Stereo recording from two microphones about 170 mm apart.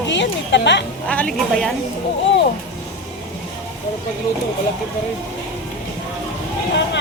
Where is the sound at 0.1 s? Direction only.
90° left.